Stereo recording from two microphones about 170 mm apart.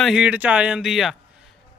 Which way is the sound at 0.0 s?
5° right (ahead or behind).